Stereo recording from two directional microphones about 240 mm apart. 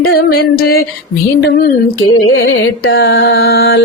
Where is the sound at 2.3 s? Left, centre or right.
Left.